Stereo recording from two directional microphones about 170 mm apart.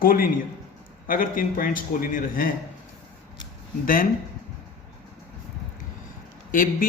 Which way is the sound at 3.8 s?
55° left (ahead or behind).